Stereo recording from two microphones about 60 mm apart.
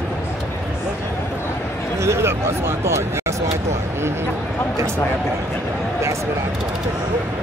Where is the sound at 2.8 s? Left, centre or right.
Right.